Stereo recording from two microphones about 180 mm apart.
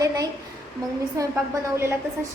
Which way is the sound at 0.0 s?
20° right (ahead or behind).